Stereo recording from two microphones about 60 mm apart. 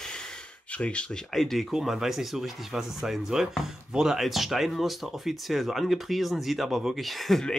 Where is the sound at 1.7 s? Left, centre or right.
Centre.